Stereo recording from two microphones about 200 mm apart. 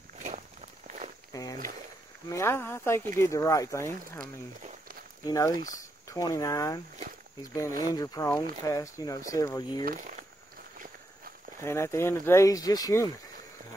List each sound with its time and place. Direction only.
0.2 s walk: 35° right (ahead or behind)
1.3 s a sound: 20° left (ahead or behind)
2.2 s speech: 15° left (ahead or behind)
4.2 s speech: 45° right (ahead or behind)
5.2 s speech: 15° left (ahead or behind)
7.8 s speech: 20° left (ahead or behind)
9.8 s speech: 40° right (ahead or behind)
11.6 s speech: 15° left (ahead or behind)